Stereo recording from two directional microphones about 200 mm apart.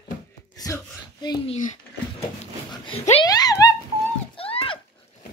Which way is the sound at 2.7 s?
25° left (ahead or behind).